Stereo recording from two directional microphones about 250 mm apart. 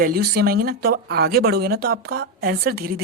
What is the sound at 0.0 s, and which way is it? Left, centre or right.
A woman's voice, right.